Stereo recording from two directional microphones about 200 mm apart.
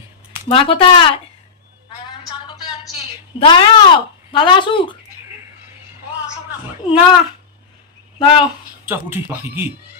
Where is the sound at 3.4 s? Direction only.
25° left (ahead or behind).